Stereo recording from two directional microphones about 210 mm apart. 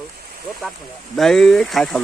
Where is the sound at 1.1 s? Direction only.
Centre (ahead or behind).